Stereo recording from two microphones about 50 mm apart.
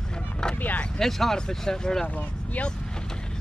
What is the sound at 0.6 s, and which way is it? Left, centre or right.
Speech, left.